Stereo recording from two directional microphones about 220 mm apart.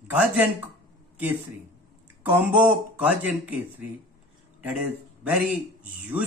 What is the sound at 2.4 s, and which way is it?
Speech, 5° right (ahead or behind).